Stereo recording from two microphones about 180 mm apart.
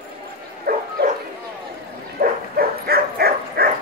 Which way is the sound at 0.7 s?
55° right (ahead or behind).